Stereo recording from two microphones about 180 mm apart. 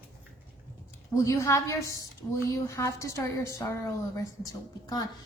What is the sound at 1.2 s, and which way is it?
A woman's voice, 15° left (ahead or behind).